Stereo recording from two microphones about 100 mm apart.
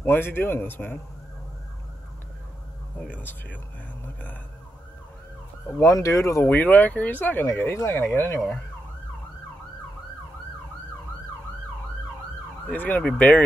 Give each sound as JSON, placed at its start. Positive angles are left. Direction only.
{"t": 0.0, "sound": "speech", "side_deg": 20}
{"t": 3.0, "sound": "speech", "side_deg": 15}
{"t": 5.8, "sound": "speech", "side_deg": 35}
{"t": 6.4, "sound": "speech", "side_deg": 15}
{"t": 12.6, "sound": "speech", "side_deg": 15}